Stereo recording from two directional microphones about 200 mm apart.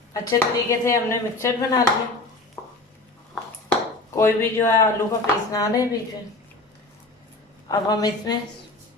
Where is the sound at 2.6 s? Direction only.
10° left (ahead or behind).